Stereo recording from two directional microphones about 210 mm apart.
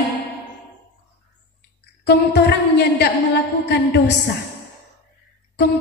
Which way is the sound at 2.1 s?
50° left (ahead or behind).